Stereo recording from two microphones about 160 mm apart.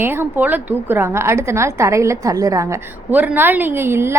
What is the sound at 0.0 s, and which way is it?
A woman's voice, 15° right (ahead or behind).